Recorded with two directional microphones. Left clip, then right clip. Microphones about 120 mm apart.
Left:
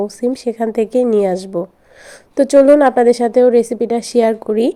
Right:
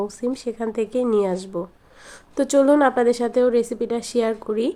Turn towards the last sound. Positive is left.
turn(degrees=40)  # may be behind; listen again after turning